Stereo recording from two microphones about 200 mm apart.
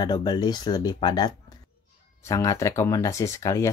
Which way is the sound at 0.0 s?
20° left (ahead or behind).